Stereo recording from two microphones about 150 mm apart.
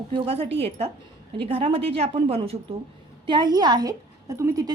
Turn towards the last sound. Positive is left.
turn(degrees=-25)  # may be behind; listen again after turning